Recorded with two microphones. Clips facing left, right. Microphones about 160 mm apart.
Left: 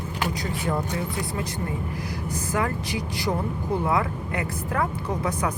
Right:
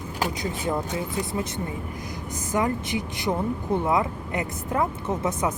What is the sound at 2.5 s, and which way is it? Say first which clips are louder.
Speech: right 3 dB; 20° right (ahead or behind).